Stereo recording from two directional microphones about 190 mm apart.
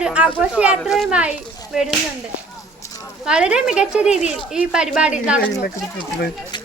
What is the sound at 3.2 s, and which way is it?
Speech, 5° right (ahead or behind).